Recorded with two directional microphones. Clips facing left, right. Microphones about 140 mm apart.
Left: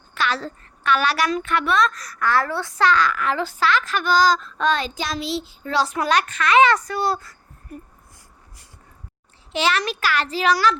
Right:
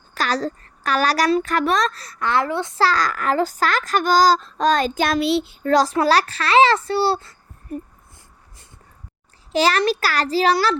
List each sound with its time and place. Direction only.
0.1 s a woman's voice: 40° right (ahead or behind); by 5.7 s 65° right (ahead or behind)
5.7 s a woman's voice: 35° right (ahead or behind)
9.5 s a woman's voice: 40° right (ahead or behind)